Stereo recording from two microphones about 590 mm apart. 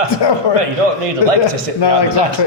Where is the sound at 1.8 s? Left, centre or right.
Left.